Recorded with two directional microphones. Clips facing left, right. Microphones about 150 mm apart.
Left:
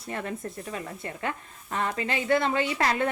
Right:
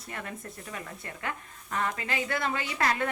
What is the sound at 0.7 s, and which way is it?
A woman's voice, 25° left (ahead or behind).